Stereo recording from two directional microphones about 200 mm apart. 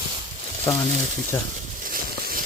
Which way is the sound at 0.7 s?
15° left (ahead or behind).